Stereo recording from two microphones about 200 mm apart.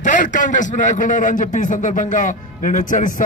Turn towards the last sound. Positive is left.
turn(degrees=40)  # may be behind; listen again after turning